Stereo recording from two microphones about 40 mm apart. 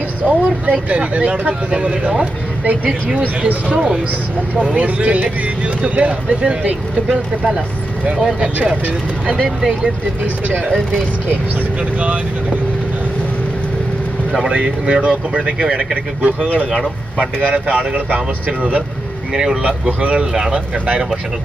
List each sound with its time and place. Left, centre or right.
0.2 s speech: right
2.6 s speech: right
3.6 s speech: centre
4.7 s speech: right
12.0 s speech: right
14.5 s speech: right
17.9 s speech: right
19.3 s speech: centre
19.6 s speech: right
20.3 s speech: centre